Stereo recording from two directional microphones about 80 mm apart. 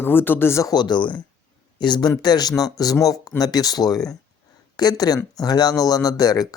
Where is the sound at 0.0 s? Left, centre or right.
Left.